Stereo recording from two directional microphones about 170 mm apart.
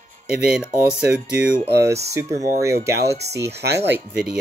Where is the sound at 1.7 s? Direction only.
15° right (ahead or behind).